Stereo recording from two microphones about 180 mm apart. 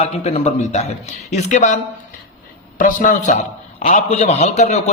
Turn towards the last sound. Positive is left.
turn(degrees=40)  # may be behind; listen again after turning